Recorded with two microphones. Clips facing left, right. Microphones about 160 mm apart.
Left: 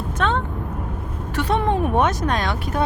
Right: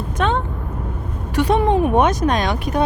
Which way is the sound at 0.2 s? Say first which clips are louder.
Right 2 dB; 15° right (ahead or behind).